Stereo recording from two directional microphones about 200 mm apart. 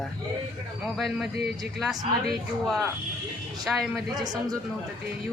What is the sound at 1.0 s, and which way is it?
A man's voice, centre (ahead or behind).